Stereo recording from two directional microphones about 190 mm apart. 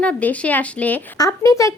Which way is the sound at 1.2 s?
20° left (ahead or behind).